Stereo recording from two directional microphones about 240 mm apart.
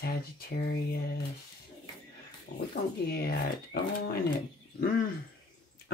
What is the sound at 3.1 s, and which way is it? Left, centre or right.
Speech, left.